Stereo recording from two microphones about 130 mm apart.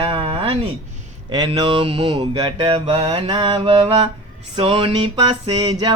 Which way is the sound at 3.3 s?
35° right (ahead or behind).